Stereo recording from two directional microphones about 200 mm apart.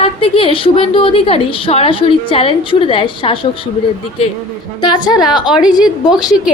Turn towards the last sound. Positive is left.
turn(degrees=-5)  # may be behind; listen again after turning